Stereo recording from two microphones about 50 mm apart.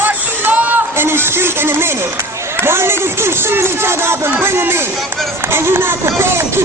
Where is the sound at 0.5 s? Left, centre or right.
Right.